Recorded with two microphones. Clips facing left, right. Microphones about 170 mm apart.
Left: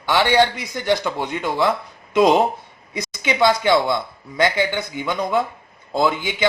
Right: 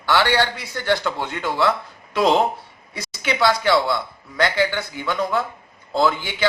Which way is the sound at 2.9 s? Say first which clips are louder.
Left 2 dB; 20° left (ahead or behind).